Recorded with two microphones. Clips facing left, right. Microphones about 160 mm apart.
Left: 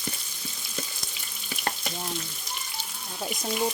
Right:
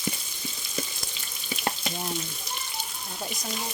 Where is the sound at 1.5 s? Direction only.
10° right (ahead or behind).